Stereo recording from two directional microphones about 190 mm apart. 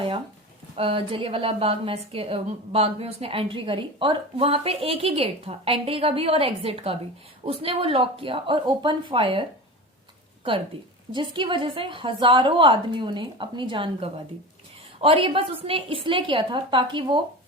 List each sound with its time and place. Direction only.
0.8 s a woman's voice: 30° right (ahead or behind)
11.1 s a woman's voice: 25° right (ahead or behind)